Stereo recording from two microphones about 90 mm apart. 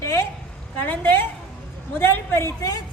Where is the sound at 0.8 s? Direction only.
20° left (ahead or behind).